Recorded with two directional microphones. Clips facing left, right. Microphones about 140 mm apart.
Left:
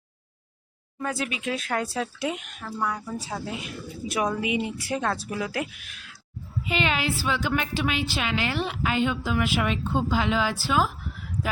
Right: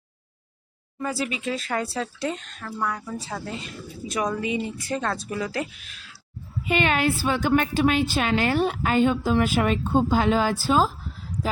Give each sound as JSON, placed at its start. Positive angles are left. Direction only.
{"t": 0.9, "sound": "speech", "side_deg": 0}
{"t": 6.7, "sound": "a woman's voice", "side_deg": -50}